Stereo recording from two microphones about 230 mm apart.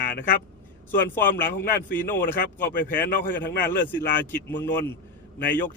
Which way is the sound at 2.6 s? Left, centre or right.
Left.